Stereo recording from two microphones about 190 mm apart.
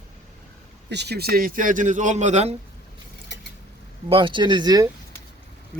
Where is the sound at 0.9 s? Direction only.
60° right (ahead or behind); by 2.6 s 35° right (ahead or behind).